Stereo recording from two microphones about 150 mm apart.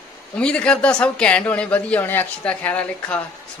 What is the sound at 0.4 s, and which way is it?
Speech, 5° left (ahead or behind).